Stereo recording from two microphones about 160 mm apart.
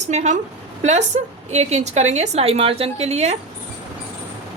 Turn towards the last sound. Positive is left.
turn(degrees=-40)  # may be behind; listen again after turning